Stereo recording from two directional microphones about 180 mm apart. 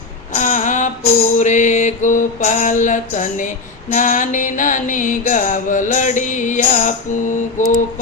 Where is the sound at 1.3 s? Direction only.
45° left (ahead or behind).